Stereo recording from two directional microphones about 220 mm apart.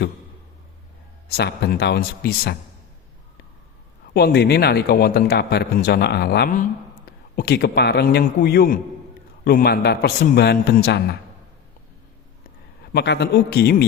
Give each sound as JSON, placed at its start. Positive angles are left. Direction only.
{"t": 1.3, "sound": "a man's voice", "side_deg": 50}
{"t": 4.1, "sound": "a man's voice", "side_deg": 45}
{"t": 12.9, "sound": "a man's voice", "side_deg": 50}